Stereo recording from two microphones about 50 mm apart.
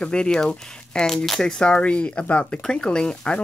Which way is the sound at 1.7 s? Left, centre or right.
Left.